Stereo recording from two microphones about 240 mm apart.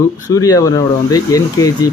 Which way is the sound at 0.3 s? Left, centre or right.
Centre.